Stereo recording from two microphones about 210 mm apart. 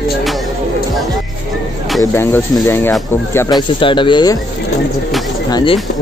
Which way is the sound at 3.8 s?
25° left (ahead or behind).